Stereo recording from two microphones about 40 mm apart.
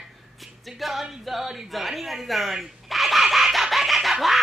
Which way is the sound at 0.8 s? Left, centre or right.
Centre.